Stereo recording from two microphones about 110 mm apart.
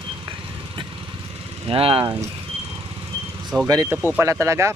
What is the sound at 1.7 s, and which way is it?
Speech, 60° right (ahead or behind).